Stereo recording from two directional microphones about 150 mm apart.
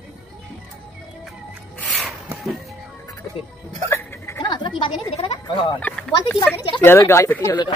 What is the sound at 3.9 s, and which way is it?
Hiccup, 15° left (ahead or behind).